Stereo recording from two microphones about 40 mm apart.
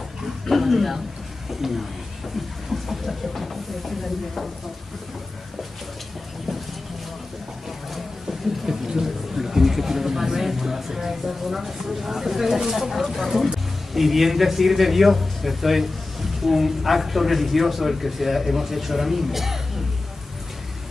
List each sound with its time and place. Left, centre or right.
0.5 s speech: centre
7.9 s speech: centre